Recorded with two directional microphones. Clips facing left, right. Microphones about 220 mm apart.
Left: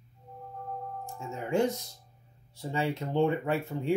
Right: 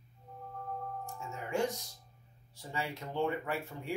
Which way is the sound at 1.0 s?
25° left (ahead or behind).